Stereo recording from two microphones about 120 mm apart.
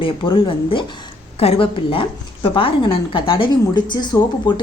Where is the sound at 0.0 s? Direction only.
45° left (ahead or behind).